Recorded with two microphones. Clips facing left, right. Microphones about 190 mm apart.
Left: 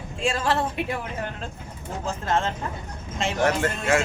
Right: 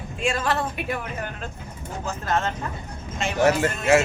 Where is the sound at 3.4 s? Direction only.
5° right (ahead or behind).